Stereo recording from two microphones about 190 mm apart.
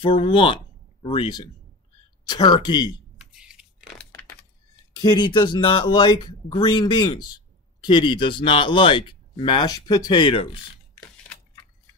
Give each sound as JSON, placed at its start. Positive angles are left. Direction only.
{"t": 0.0, "sound": "speech", "side_deg": 30}
{"t": 3.2, "sound": "a sound", "side_deg": -5}
{"t": 5.0, "sound": "speech", "side_deg": 25}